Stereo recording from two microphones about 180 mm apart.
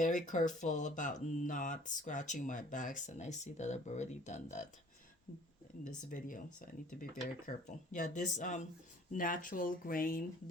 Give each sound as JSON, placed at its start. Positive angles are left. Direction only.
{"t": 0.0, "sound": "speech", "side_deg": 45}
{"t": 5.8, "sound": "speech", "side_deg": 50}